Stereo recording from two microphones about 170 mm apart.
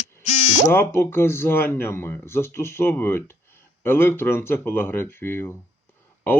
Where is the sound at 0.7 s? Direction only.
15° left (ahead or behind).